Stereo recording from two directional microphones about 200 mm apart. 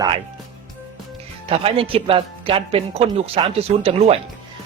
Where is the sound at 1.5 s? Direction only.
30° right (ahead or behind).